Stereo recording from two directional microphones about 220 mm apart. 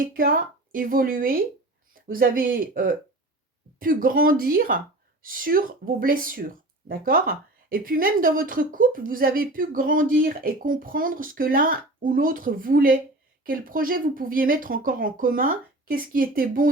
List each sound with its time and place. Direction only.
0.0 s speech: 40° right (ahead or behind)